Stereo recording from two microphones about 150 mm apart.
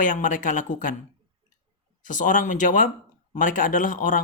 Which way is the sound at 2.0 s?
60° left (ahead or behind).